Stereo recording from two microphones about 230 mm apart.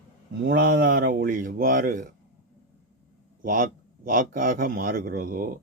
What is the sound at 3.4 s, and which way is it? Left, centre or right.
Speech, right.